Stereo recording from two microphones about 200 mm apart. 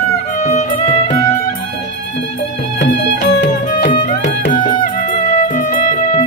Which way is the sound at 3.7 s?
40° left (ahead or behind).